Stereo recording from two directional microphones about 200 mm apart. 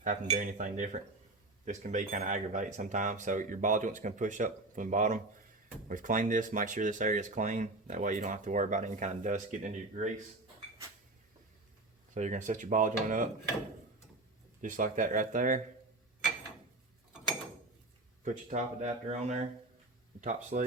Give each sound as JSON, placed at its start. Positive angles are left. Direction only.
{"t": 0.0, "sound": "speech", "side_deg": -40}
{"t": 12.1, "sound": "speech", "side_deg": -35}
{"t": 14.6, "sound": "speech", "side_deg": -40}
{"t": 18.3, "sound": "speech", "side_deg": -35}